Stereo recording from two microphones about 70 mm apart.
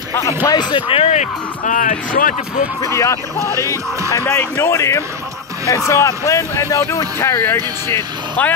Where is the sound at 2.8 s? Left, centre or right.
Left.